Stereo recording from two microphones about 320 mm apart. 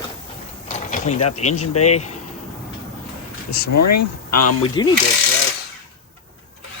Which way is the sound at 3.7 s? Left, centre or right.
Left.